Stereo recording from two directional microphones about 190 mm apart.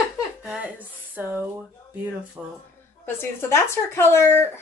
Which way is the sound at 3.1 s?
15° left (ahead or behind).